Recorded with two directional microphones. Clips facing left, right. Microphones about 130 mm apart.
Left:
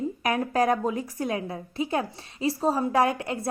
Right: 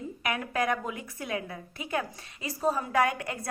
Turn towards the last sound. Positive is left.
turn(degrees=30)  # may be behind; listen again after turning